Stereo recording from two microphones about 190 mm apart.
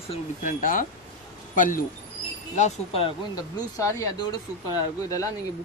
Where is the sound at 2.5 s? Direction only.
35° left (ahead or behind).